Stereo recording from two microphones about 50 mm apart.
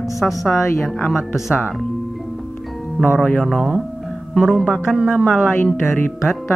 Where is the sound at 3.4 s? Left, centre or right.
Centre.